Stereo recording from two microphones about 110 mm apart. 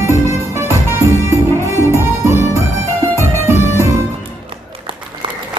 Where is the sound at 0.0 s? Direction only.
25° right (ahead or behind).